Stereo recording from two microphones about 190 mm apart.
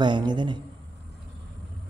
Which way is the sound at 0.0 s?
25° right (ahead or behind).